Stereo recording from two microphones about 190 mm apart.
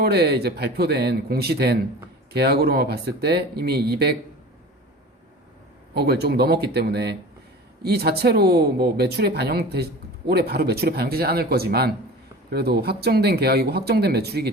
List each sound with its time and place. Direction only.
0.0 s speech: 55° right (ahead or behind)
5.9 s speech: 60° right (ahead or behind)